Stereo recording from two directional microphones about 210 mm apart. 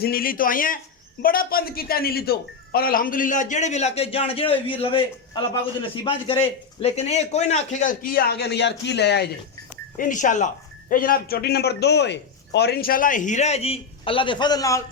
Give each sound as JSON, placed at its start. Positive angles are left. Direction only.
{"t": 0.0, "sound": "a man's voice", "side_deg": 45}
{"t": 10.0, "sound": "speech", "side_deg": 40}